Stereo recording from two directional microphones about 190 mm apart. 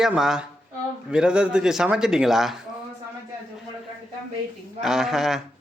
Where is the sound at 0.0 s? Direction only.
Centre (ahead or behind).